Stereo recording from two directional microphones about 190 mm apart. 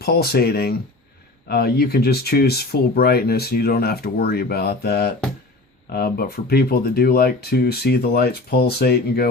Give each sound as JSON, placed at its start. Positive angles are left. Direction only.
{"t": 0.0, "sound": "speech", "side_deg": 55}